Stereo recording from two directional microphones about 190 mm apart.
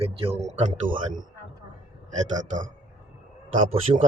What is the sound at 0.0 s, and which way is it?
Speech, 30° right (ahead or behind).